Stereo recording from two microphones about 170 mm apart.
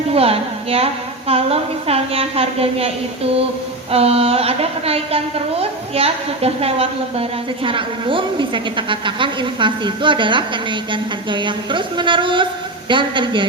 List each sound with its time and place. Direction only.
0.1 s a woman's voice: 35° right (ahead or behind)
3.9 s a woman's voice: 35° right (ahead or behind)